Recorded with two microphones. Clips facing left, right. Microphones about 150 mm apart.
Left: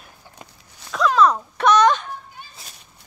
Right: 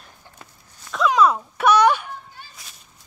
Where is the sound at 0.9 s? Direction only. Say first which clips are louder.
Left 1 dB; 10° right (ahead or behind).